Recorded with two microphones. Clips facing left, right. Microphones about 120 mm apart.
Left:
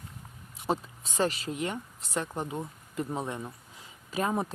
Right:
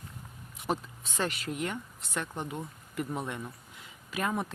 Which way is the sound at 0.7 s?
35° left (ahead or behind).